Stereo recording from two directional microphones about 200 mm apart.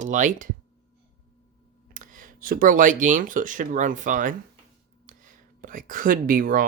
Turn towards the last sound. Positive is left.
turn(degrees=-45)  # may be behind; listen again after turning